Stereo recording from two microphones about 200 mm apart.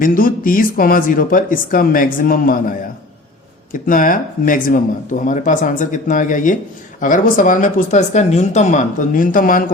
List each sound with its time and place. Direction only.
0.0 s speech: 45° left (ahead or behind)